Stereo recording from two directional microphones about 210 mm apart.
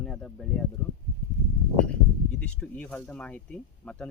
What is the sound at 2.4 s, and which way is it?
Speech, 5° left (ahead or behind).